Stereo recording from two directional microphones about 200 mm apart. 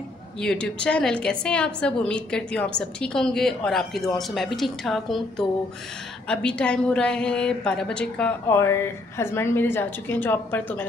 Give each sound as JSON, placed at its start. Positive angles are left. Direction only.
{"t": 0.4, "sound": "a woman's voice", "side_deg": 5}